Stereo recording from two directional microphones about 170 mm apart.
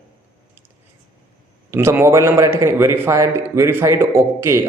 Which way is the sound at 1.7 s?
15° right (ahead or behind).